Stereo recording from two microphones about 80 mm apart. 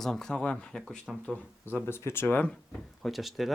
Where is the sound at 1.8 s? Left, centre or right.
Left.